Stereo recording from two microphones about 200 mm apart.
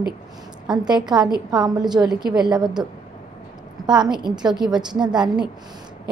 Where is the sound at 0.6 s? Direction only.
20° right (ahead or behind).